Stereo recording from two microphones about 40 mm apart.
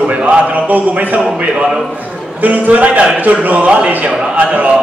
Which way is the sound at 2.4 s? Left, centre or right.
Right.